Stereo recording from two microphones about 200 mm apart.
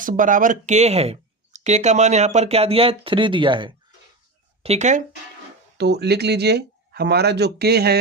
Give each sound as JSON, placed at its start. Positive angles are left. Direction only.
{"t": 0.0, "sound": "speech", "side_deg": -40}
{"t": 5.7, "sound": "speech", "side_deg": -55}